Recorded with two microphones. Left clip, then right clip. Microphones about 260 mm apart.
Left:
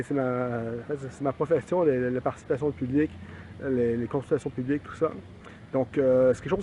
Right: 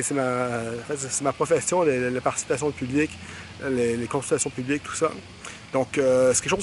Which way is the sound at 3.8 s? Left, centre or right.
Centre.